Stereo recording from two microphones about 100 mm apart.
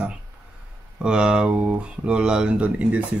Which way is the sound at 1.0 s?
10° right (ahead or behind).